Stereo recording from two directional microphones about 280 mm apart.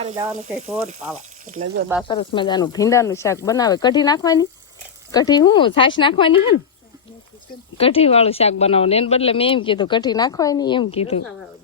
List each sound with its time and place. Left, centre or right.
0.3 s speech: right
2.0 s speech: centre
7.8 s speech: centre